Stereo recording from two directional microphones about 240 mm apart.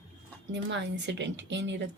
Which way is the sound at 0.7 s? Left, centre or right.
Right.